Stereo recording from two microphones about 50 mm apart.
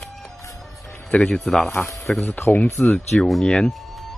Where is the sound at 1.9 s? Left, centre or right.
Left.